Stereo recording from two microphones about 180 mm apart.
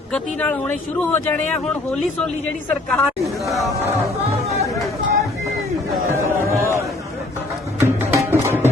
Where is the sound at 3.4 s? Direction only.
Centre (ahead or behind).